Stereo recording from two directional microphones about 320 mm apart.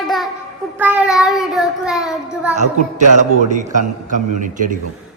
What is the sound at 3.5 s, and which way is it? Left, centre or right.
Speech, right.